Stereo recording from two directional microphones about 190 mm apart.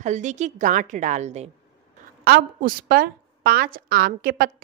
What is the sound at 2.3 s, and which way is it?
A woman's voice, 50° right (ahead or behind).